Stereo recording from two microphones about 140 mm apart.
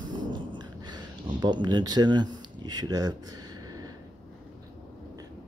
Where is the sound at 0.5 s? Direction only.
30° right (ahead or behind).